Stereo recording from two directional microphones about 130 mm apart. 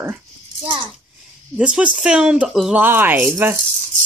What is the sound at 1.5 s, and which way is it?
Speech, 10° right (ahead or behind).